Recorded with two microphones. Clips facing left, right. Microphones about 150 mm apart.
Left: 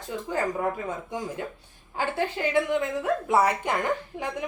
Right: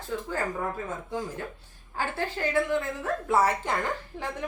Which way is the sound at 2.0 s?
15° left (ahead or behind).